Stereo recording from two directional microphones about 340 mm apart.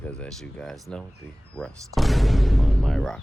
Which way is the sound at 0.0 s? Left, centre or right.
Centre.